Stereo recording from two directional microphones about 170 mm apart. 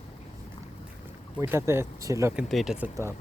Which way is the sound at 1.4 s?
15° right (ahead or behind).